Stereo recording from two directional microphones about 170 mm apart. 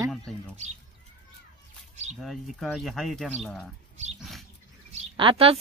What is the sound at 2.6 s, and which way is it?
A man's voice, centre (ahead or behind).